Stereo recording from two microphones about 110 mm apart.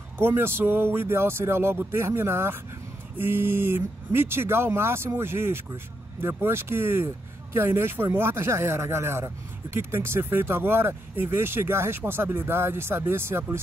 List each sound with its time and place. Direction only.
0.2 s speech: 20° right (ahead or behind)